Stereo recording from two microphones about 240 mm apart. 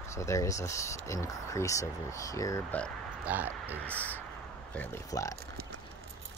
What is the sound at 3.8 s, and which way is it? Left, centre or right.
Speech, centre.